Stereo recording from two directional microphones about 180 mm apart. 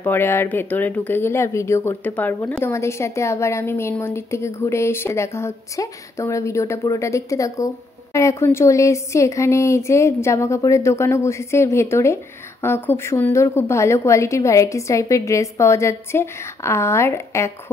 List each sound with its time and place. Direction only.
0.0 s speech: 10° left (ahead or behind)